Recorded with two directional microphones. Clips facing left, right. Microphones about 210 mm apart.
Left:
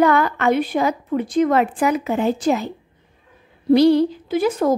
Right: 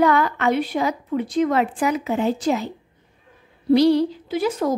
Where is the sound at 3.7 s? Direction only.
50° left (ahead or behind).